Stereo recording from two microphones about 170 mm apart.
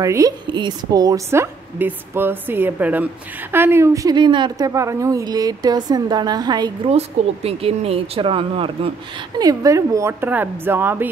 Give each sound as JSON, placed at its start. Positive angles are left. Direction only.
{"t": 0.0, "sound": "a woman's voice", "side_deg": -20}
{"t": 9.4, "sound": "a woman's voice", "side_deg": -20}